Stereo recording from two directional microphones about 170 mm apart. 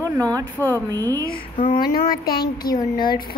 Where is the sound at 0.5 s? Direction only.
10° left (ahead or behind).